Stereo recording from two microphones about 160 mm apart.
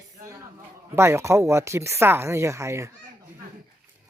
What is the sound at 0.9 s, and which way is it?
Speech, 15° right (ahead or behind).